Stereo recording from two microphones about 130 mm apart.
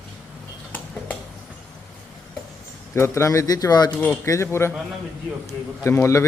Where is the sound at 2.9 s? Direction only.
20° left (ahead or behind).